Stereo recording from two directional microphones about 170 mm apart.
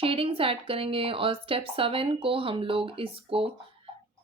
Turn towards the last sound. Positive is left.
turn(degrees=-35)  # may be behind; listen again after turning